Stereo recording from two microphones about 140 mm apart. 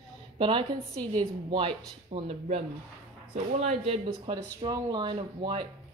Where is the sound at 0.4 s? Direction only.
35° right (ahead or behind).